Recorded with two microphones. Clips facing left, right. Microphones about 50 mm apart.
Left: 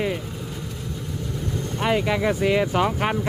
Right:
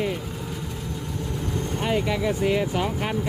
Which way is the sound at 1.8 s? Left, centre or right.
Left.